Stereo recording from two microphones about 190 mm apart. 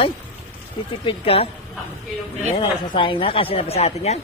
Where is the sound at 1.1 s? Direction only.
30° left (ahead or behind).